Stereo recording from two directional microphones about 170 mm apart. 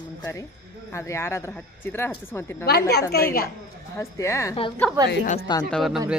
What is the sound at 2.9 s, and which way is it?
Speech, 70° left (ahead or behind).